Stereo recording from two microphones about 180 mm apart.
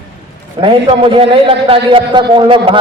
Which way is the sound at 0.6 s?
30° right (ahead or behind).